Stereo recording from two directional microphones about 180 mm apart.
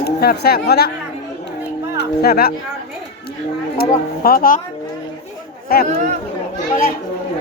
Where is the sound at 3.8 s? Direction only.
55° left (ahead or behind).